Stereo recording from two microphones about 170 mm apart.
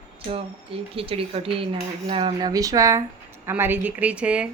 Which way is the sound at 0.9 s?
35° right (ahead or behind).